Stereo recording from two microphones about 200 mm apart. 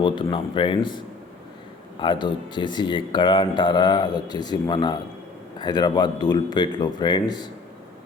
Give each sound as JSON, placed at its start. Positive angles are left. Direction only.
{"t": 0.0, "sound": "speech", "side_deg": 25}